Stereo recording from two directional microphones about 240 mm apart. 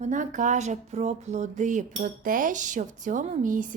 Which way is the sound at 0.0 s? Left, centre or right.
Right.